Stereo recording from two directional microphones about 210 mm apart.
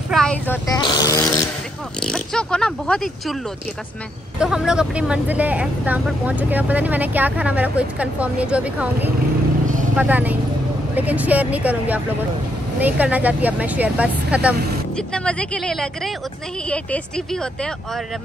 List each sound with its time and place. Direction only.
0.1 s a sound: 5° left (ahead or behind)
0.7 s fart: 20° left (ahead or behind)
2.0 s speech: 5° left (ahead or behind)
4.4 s speech: 5° right (ahead or behind)
15.0 s speech: 5° left (ahead or behind)